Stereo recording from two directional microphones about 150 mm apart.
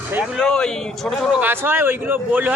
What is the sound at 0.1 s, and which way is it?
Speech, 10° right (ahead or behind).